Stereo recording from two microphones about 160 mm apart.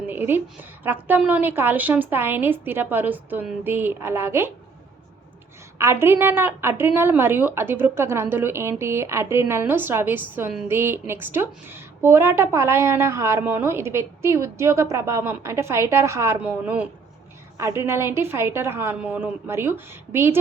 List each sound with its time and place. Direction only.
0.1 s a sound: 10° right (ahead or behind)
0.9 s a woman's voice: 10° right (ahead or behind)
5.7 s a woman's voice: 15° right (ahead or behind)